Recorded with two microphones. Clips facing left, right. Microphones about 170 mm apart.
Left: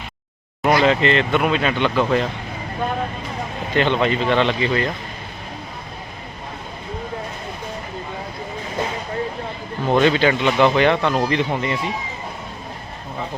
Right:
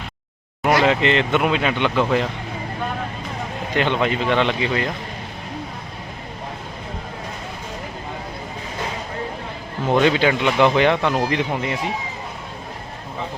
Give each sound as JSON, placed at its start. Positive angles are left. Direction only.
{"t": 0.6, "sound": "speech", "side_deg": -15}
{"t": 3.8, "sound": "speech", "side_deg": -10}
{"t": 9.9, "sound": "speech", "side_deg": -15}